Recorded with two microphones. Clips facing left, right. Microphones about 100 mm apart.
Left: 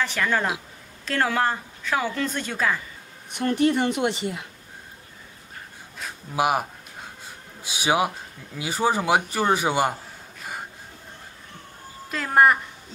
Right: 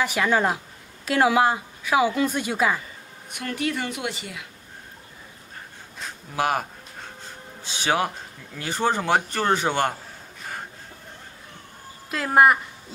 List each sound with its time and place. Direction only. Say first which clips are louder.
0.0 s speech: right 3 dB; 10° right (ahead or behind)
3.3 s a woman's voice: left 7 dB; 30° left (ahead or behind)
5.9 s a sound: left 2 dB; 15° left (ahead or behind)
7.6 s a man's voice: left 1 dB; 10° left (ahead or behind)
12.1 s a woman's voice: right 1 dB; 5° right (ahead or behind)